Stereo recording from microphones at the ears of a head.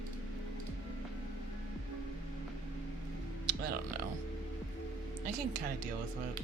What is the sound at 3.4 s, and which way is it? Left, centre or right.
Music, right.